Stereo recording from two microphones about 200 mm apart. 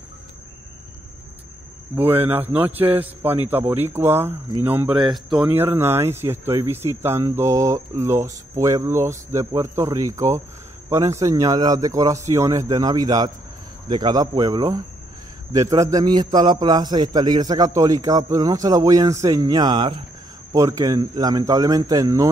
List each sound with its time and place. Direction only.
2.0 s a man's voice: 10° right (ahead or behind)